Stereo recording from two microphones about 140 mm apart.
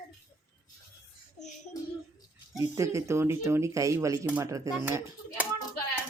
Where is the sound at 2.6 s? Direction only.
20° right (ahead or behind).